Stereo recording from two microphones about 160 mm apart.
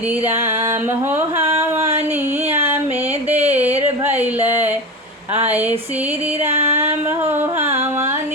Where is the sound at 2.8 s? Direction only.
40° right (ahead or behind).